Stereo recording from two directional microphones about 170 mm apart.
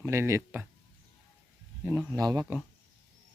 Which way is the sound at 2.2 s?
20° right (ahead or behind).